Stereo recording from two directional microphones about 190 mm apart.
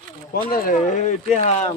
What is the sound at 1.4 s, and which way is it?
Speech, 35° left (ahead or behind).